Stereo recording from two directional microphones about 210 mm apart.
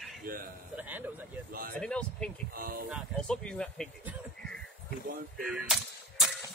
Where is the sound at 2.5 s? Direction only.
45° right (ahead or behind).